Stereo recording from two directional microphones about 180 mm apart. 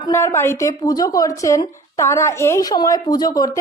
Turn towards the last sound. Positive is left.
turn(degrees=20)  # may be behind; listen again after turning